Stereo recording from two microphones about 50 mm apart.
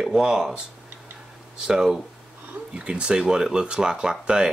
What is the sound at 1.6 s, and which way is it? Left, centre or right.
Speech, centre.